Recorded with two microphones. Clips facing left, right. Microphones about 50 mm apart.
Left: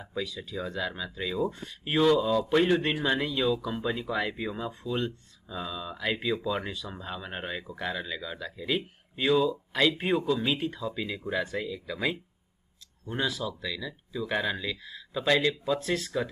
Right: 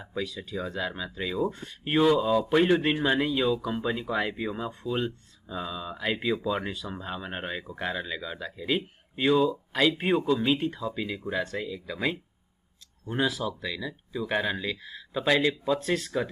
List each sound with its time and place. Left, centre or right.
0.0 s speech: centre